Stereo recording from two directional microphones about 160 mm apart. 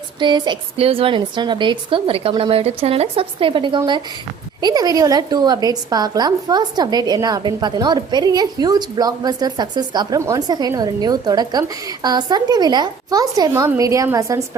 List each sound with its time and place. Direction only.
0.2 s a woman's voice: 30° right (ahead or behind)